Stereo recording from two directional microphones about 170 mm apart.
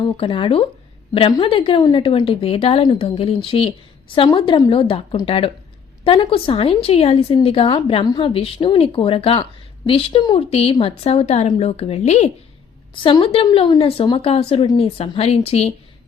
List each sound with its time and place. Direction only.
0.0 s a woman's voice: 30° left (ahead or behind)